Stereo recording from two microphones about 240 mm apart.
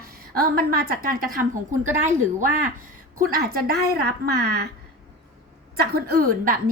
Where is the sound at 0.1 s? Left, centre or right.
Right.